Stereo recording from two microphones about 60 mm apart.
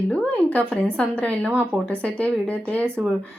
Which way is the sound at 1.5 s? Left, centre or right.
Right.